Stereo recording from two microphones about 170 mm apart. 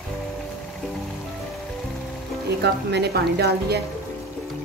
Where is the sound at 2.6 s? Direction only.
75° right (ahead or behind).